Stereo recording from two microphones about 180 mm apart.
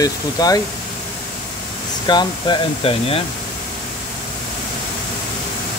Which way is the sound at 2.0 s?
25° left (ahead or behind).